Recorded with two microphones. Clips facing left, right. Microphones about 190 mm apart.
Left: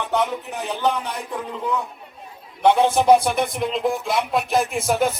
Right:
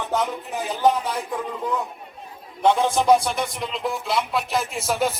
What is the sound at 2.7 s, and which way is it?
Music, 60° left (ahead or behind).